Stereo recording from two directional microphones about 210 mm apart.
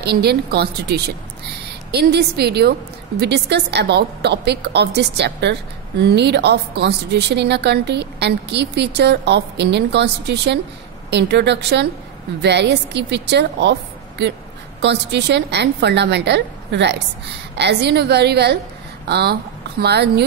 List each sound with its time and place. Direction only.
0.0 s a woman's voice: 50° right (ahead or behind)